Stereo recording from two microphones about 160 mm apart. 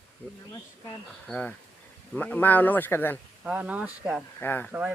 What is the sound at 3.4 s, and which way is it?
Speech, 5° right (ahead or behind).